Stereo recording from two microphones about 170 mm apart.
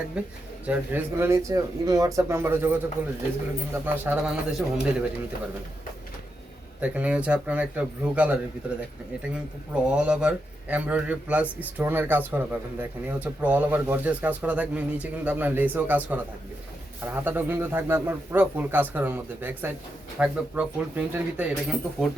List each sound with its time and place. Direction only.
0.2 s a man's voice: 5° right (ahead or behind)
6.8 s a man's voice: 10° right (ahead or behind)
9.7 s a man's voice: 5° right (ahead or behind)
17.2 s a man's voice: 10° right (ahead or behind)